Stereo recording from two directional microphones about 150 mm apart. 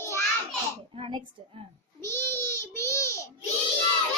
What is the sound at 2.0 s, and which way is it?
Babbling, 15° left (ahead or behind).